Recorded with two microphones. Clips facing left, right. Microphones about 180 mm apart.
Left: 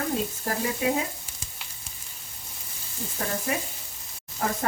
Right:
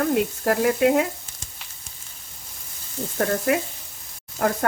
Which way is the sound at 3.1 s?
65° right (ahead or behind).